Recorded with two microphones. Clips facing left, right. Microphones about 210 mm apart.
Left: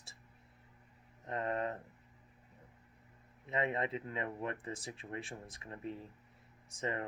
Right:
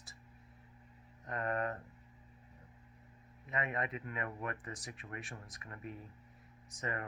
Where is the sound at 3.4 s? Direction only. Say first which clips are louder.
Left 3 dB; 30° left (ahead or behind).